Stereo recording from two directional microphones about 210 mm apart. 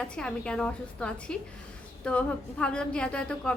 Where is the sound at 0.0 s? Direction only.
5° left (ahead or behind).